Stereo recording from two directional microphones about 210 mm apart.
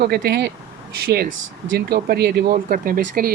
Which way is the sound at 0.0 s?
50° right (ahead or behind).